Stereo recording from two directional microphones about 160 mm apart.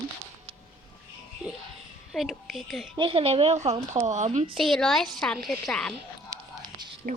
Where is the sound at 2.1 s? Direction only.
Centre (ahead or behind).